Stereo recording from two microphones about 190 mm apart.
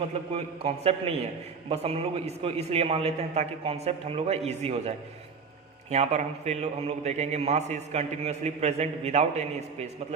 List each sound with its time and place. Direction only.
0.3 s a man's voice: 30° right (ahead or behind)